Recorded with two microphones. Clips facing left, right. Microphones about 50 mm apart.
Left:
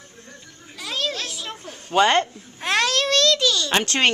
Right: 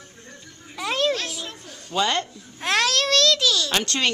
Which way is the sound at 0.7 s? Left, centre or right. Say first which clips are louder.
Right 4 dB; right.